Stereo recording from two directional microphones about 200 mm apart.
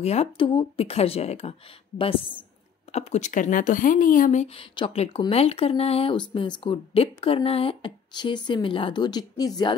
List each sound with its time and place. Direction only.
0.0 s speech: 30° left (ahead or behind)